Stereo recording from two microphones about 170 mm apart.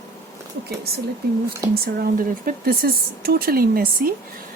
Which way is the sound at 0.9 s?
65° right (ahead or behind).